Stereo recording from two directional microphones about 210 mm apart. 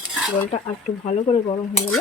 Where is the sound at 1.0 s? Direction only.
25° left (ahead or behind).